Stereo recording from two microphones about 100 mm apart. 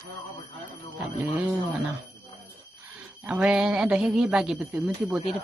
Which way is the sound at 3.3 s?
5° right (ahead or behind).